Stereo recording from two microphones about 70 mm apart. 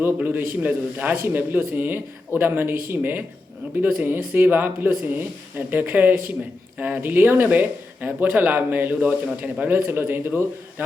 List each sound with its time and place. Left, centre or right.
0.0 s speech: right